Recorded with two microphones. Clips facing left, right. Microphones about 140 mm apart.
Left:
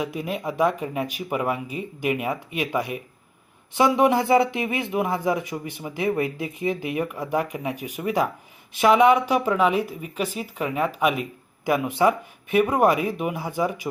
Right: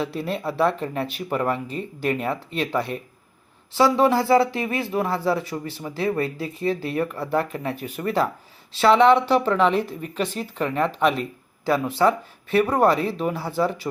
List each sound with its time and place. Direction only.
0.0 s a woman's voice: 15° left (ahead or behind)